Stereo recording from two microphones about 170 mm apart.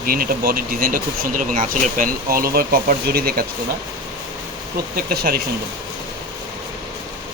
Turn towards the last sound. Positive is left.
turn(degrees=-65)  # may be behind; listen again after turning